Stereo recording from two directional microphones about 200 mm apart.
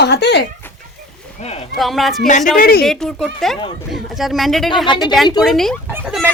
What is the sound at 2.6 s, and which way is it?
Speech, 50° left (ahead or behind).